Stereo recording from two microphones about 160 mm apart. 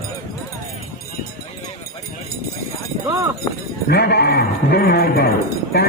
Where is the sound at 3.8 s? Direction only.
90° left; by 5.3 s 75° left (ahead or behind).